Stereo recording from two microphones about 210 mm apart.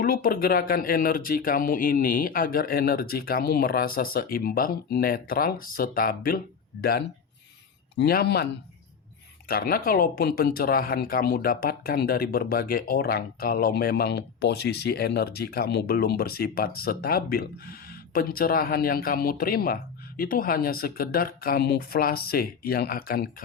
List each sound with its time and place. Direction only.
0.0 s speech: 40° left (ahead or behind)
7.9 s speech: 50° left (ahead or behind)
9.5 s speech: 45° left (ahead or behind)